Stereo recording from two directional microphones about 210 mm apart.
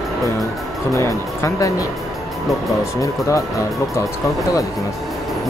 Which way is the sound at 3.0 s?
15° left (ahead or behind).